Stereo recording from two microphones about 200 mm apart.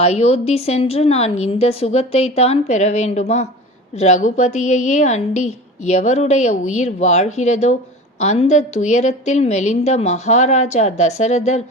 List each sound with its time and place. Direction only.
0.0 s a woman's voice: 30° left (ahead or behind)